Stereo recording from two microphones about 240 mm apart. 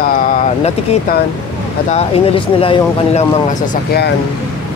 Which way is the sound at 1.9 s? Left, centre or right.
Left.